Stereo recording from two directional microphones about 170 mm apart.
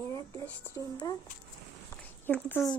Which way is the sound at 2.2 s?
10° left (ahead or behind).